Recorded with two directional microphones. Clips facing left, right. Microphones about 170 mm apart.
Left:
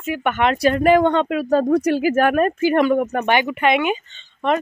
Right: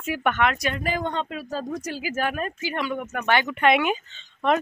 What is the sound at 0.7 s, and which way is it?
Speech, 65° left (ahead or behind).